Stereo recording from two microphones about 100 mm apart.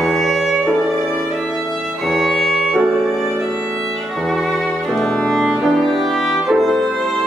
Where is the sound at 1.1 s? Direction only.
Centre (ahead or behind).